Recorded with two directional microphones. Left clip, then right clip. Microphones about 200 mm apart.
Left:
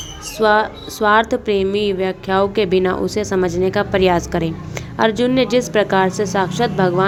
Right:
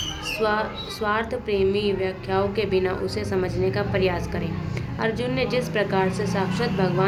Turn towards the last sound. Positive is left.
turn(degrees=45)  # may be behind; listen again after turning